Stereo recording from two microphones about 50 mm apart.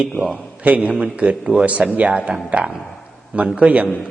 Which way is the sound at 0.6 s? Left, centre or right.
Right.